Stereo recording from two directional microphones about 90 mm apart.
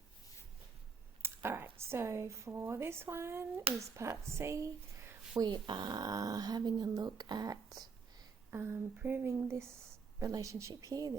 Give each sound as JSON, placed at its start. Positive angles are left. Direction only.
{"t": 1.2, "sound": "speech", "side_deg": -25}
{"t": 5.4, "sound": "speech", "side_deg": -60}
{"t": 8.4, "sound": "speech", "side_deg": -25}